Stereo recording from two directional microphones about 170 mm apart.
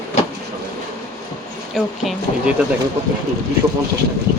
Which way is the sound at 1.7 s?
Centre (ahead or behind).